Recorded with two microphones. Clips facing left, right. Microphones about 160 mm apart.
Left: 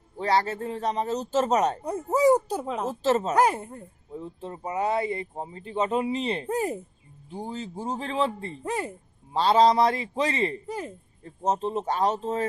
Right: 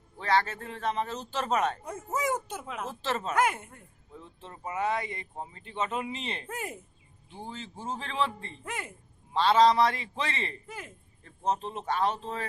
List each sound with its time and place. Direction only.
0.2 s a man's voice: 35° left (ahead or behind)